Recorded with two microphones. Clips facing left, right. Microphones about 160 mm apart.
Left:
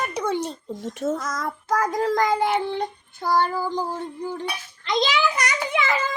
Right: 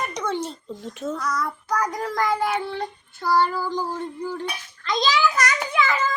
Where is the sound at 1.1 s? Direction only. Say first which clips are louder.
Right 1 dB; 45° left (ahead or behind).